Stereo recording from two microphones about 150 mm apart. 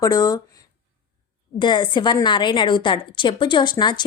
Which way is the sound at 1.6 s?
30° left (ahead or behind).